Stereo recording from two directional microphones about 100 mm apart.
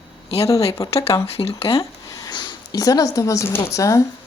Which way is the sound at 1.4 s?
70° left (ahead or behind).